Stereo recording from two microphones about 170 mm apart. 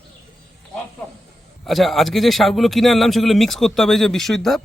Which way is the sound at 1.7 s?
Centre (ahead or behind).